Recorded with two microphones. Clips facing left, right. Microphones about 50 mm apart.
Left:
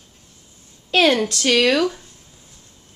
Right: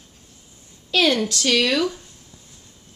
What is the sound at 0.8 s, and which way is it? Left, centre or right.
A woman's voice, left.